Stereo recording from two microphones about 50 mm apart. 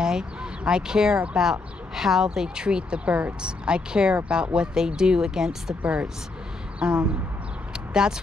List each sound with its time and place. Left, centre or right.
0.0 s speech: centre
5.8 s speech: right
6.8 s a sound: centre